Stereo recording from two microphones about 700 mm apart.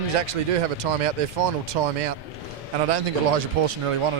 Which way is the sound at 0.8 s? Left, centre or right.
Right.